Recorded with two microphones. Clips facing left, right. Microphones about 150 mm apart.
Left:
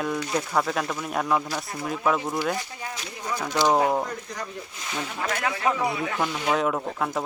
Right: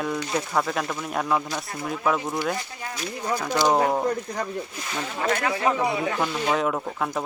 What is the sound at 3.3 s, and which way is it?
Speech, 50° right (ahead or behind).